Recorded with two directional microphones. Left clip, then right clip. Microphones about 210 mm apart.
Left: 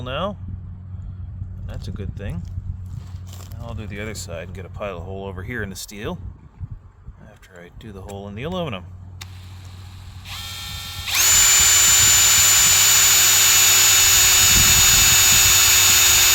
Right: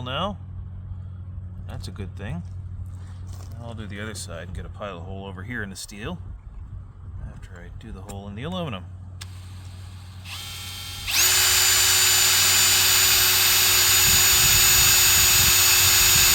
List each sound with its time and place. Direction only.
0.0 s speech: 15° left (ahead or behind)
1.7 s speech: 5° left (ahead or behind)
3.6 s speech: 20° left (ahead or behind); by 6.1 s 35° left (ahead or behind)
7.5 s speech: 35° left (ahead or behind)
10.2 s drill: 20° left (ahead or behind)